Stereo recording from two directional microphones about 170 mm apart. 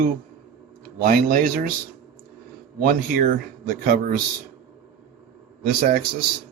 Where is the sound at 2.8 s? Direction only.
60° right (ahead or behind).